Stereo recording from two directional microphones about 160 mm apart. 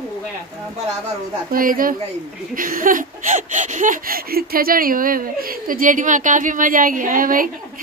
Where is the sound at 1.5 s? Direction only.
60° right (ahead or behind).